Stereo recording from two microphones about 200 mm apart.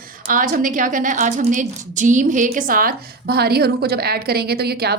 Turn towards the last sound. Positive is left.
turn(degrees=-55)  # may be behind; listen again after turning